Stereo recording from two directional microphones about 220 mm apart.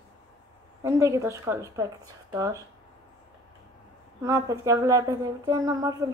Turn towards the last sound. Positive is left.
turn(degrees=-15)  # may be behind; listen again after turning